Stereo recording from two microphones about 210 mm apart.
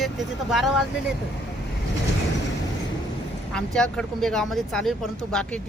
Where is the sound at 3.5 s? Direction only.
5° left (ahead or behind).